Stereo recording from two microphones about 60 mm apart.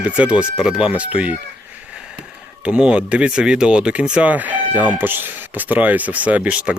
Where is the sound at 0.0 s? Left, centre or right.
Right.